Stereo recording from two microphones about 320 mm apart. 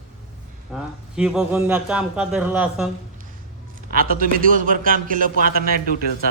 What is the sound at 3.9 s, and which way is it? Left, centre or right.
A man's voice, right.